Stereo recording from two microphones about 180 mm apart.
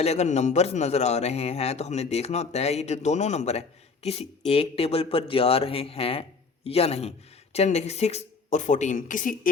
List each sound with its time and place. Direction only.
0.0 s a man's voice: 35° left (ahead or behind)